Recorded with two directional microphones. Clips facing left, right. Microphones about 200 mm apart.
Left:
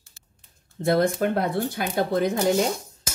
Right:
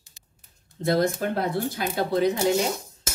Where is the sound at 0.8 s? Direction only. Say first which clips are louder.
Left 2 dB; 55° left (ahead or behind).